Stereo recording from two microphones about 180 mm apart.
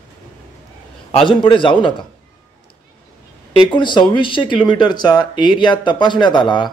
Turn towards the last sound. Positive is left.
turn(degrees=25)  # may be behind; listen again after turning